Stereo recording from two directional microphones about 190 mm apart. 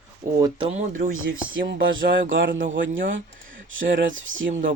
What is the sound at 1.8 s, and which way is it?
Speech, 80° right.